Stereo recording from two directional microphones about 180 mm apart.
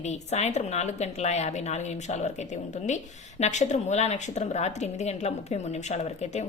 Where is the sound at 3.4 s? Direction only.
40° left (ahead or behind).